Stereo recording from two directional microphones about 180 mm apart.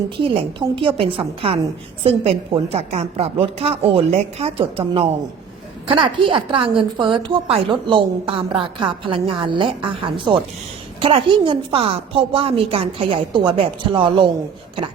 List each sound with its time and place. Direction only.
0.2 s a woman's voice: 30° right (ahead or behind)